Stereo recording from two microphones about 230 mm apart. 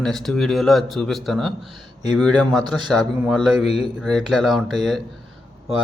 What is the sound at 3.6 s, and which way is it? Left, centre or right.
Speech, left.